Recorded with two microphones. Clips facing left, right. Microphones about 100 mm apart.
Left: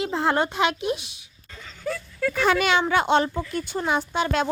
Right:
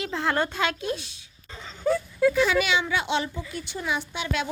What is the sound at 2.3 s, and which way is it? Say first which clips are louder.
Speech: left 4 dB; 50° left (ahead or behind).